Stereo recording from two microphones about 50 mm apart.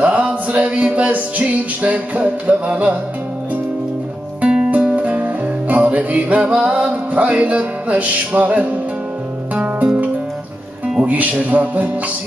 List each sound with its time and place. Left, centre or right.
0.0 s music: right
4.4 s music: centre
4.9 s music: right
11.1 s music: right